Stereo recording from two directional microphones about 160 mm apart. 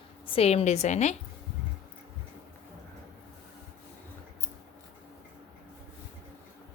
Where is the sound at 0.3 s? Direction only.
40° left (ahead or behind).